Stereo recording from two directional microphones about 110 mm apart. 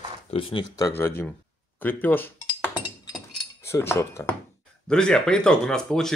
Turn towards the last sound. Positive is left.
turn(degrees=5)  # may be behind; listen again after turning